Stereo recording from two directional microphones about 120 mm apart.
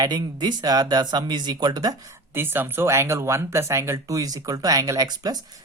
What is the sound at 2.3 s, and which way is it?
Speech, 20° right (ahead or behind).